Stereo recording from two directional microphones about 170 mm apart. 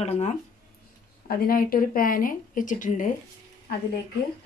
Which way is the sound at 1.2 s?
60° left (ahead or behind).